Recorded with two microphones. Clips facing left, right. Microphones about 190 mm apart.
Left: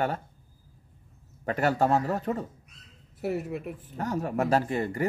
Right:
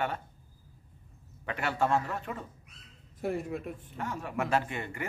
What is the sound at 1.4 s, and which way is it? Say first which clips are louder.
Speech: left 6 dB; 40° left (ahead or behind).